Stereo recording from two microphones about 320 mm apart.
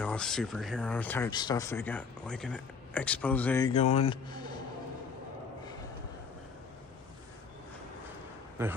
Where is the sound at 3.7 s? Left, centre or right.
Left.